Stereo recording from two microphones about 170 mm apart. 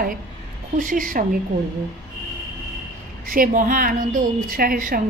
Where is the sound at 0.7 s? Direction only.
50° right (ahead or behind).